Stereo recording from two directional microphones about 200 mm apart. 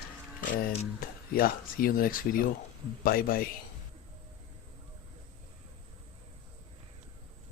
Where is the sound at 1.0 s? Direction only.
45° left (ahead or behind).